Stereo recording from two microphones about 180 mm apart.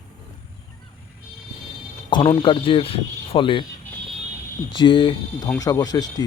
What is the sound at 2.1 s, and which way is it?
Speech, 25° left (ahead or behind).